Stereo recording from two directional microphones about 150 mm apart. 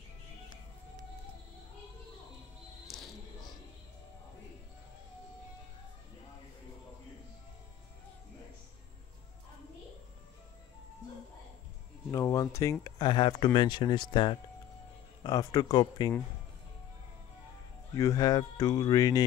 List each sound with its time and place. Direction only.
2.9 s music: centre (ahead or behind)
12.1 s a sound: 20° left (ahead or behind)
12.8 s speech: 30° left (ahead or behind)
17.9 s speech: 20° left (ahead or behind)